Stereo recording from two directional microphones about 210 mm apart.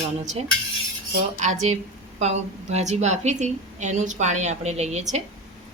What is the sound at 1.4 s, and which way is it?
A woman's voice, 35° right (ahead or behind).